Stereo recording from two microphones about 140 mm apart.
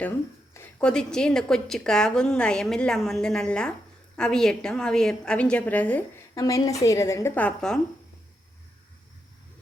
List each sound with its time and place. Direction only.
0.8 s a woman's voice: 5° left (ahead or behind)
6.3 s a woman's voice: 25° left (ahead or behind); by 7.8 s 10° left (ahead or behind)